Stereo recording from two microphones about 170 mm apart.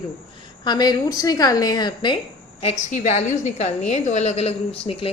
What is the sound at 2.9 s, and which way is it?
A woman's voice, 45° left (ahead or behind).